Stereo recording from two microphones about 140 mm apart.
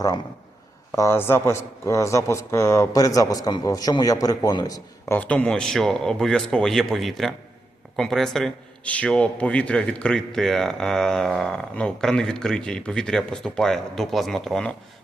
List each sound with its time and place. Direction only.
0.9 s a man's voice: 20° left (ahead or behind)
5.1 s a man's voice: 10° left (ahead or behind)